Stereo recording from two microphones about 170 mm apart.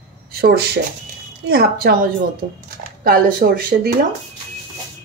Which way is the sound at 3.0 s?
55° right (ahead or behind).